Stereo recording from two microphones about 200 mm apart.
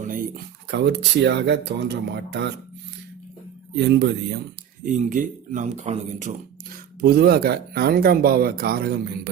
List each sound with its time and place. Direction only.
0.0 s a sound: 40° right (ahead or behind)
0.7 s speech: 60° right (ahead or behind)
3.8 s speech: 60° right (ahead or behind)
4.9 s speech: 40° right (ahead or behind)
7.0 s speech: 50° right (ahead or behind)